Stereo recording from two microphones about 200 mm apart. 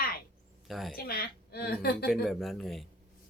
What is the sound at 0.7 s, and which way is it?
Speech, centre (ahead or behind).